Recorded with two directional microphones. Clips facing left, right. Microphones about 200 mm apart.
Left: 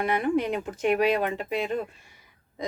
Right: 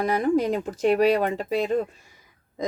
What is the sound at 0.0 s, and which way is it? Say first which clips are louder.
Speech: right 3 dB; 40° right (ahead or behind).